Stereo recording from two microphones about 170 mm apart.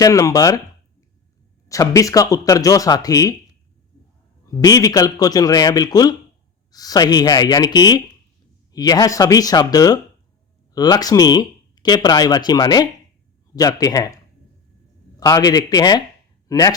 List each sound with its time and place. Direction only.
0.0 s speech: 20° left (ahead or behind)
1.6 s speech: 20° left (ahead or behind)
4.4 s speech: 20° left (ahead or behind)
15.2 s speech: 20° left (ahead or behind)